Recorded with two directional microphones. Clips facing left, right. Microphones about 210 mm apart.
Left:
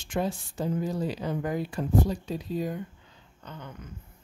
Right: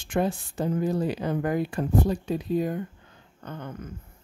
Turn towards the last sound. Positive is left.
turn(degrees=-50)  # may be behind; listen again after turning